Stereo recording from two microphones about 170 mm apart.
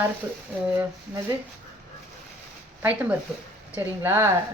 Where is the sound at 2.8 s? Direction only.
10° right (ahead or behind).